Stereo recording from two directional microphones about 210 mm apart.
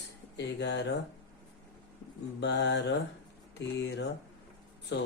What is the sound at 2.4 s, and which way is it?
Speech, 55° left (ahead or behind).